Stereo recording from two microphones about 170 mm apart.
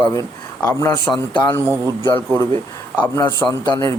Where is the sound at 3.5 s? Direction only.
20° left (ahead or behind).